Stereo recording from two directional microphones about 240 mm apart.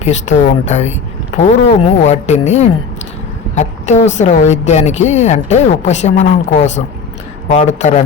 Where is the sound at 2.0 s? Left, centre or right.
Left.